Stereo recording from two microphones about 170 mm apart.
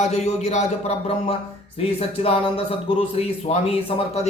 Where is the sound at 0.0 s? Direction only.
40° left (ahead or behind).